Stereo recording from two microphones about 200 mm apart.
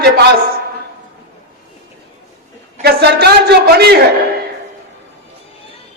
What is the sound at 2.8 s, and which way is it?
A man's voice, 55° right (ahead or behind).